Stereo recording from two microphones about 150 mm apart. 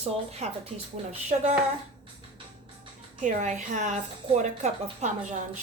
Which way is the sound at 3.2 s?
55° right (ahead or behind).